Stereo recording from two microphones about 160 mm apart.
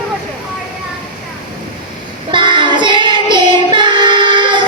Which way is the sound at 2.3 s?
30° right (ahead or behind).